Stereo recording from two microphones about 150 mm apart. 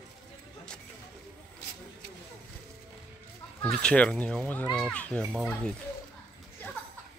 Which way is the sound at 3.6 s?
5° left (ahead or behind).